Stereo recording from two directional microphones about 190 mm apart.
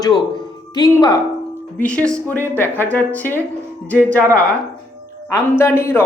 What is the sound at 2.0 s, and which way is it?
Speech, 5° left (ahead or behind).